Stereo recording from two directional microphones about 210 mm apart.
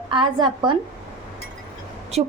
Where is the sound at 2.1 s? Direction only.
30° right (ahead or behind).